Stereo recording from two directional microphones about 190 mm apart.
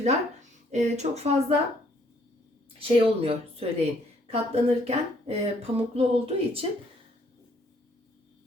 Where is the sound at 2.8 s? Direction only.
30° right (ahead or behind).